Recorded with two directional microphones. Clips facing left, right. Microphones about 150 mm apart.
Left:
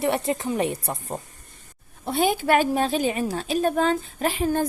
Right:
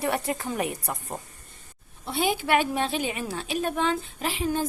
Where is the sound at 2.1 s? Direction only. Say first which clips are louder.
Left 4 dB; 45° left (ahead or behind).